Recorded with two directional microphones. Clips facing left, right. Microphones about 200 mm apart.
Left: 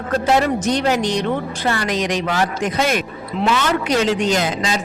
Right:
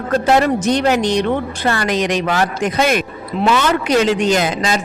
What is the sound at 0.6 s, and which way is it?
Speech, 60° right (ahead or behind).